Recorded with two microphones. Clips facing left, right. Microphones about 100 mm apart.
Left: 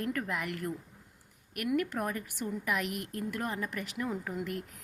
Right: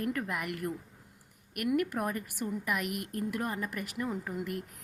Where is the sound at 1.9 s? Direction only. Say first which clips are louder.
Right 1 dB; 5° right (ahead or behind).